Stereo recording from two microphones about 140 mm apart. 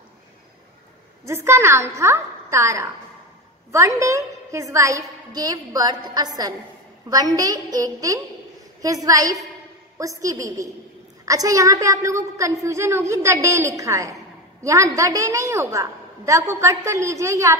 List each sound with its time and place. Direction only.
1.2 s a woman's voice: 20° right (ahead or behind)